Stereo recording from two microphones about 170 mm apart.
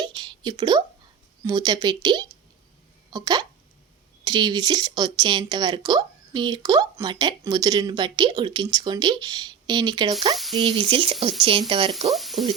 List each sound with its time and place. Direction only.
0.0 s a sound: 25° right (ahead or behind)
1.5 s speech: 25° right (ahead or behind)
10.3 s speech: centre (ahead or behind)
10.6 s speech: 35° right (ahead or behind)
12.1 s speech: centre (ahead or behind)